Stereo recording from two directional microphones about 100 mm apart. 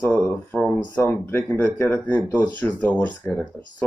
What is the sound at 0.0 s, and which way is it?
Speech, 20° left (ahead or behind).